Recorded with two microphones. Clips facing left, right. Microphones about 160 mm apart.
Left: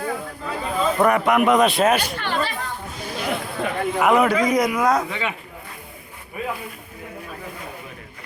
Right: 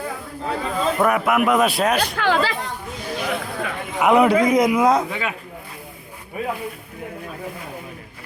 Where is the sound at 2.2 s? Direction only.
90° right.